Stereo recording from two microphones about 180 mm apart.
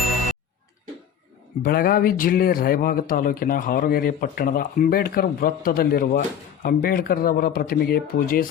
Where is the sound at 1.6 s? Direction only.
55° left (ahead or behind).